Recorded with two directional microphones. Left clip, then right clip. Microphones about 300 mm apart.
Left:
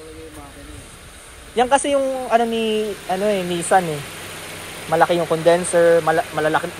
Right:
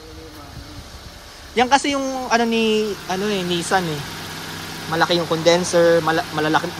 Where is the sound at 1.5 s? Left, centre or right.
Centre.